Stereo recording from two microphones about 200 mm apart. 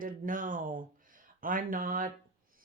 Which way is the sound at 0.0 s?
40° right (ahead or behind).